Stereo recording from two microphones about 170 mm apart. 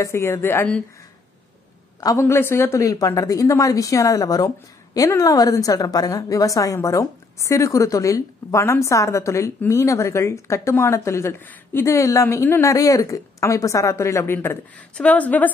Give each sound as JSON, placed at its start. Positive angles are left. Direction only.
{"t": 0.0, "sound": "a woman's voice", "side_deg": 15}
{"t": 2.0, "sound": "a woman's voice", "side_deg": 15}